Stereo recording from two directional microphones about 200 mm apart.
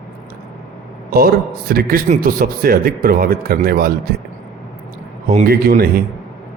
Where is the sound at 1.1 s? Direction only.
50° right (ahead or behind).